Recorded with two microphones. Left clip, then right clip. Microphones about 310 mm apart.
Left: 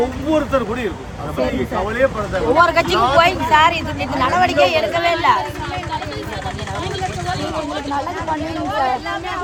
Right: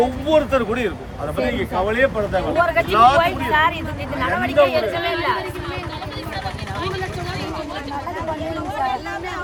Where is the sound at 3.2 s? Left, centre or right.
Centre.